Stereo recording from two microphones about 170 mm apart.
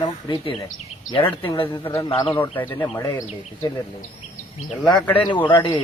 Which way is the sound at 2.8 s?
15° left (ahead or behind).